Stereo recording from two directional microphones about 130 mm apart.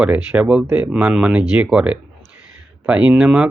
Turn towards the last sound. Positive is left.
turn(degrees=-10)  # may be behind; listen again after turning